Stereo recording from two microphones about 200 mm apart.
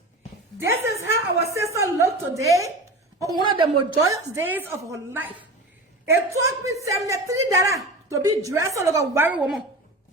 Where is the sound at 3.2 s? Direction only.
20° right (ahead or behind).